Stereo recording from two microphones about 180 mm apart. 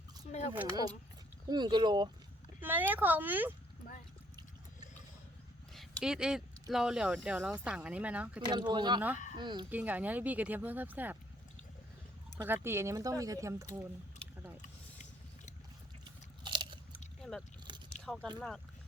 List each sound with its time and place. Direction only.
0.3 s speech: 40° left (ahead or behind)
1.5 s speech: 25° right (ahead or behind)
2.6 s speech: 10° right (ahead or behind)
5.7 s speech: centre (ahead or behind)
8.4 s speech: 25° right (ahead or behind)
9.6 s speech: 10° right (ahead or behind)
12.4 s speech: 15° right (ahead or behind)
16.4 s biting: 25° right (ahead or behind)
17.2 s vehicle: 5° left (ahead or behind)
17.7 s biting: 25° right (ahead or behind)
18.0 s speech: 5° left (ahead or behind)